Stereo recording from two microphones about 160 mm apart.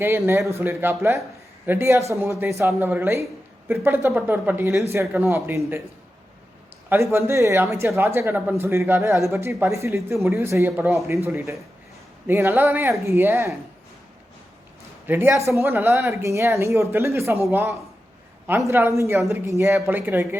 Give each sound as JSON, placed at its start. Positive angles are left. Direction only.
{"t": 0.0, "sound": "speech", "side_deg": -15}
{"t": 6.9, "sound": "speech", "side_deg": -15}
{"t": 12.3, "sound": "speech", "side_deg": -15}
{"t": 15.0, "sound": "speech", "side_deg": -15}